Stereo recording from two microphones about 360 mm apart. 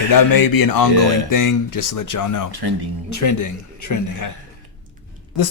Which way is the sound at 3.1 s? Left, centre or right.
Left.